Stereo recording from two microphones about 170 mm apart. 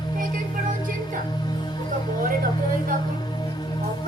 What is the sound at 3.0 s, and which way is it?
Music, 25° left (ahead or behind).